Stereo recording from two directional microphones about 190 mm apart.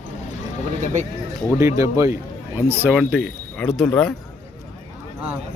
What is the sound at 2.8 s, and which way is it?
A man's voice, 5° right (ahead or behind).